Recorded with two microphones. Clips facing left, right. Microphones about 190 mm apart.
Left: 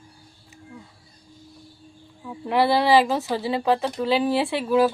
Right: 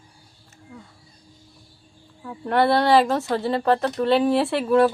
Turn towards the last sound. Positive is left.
turn(degrees=0)  # may be behind; listen again after turning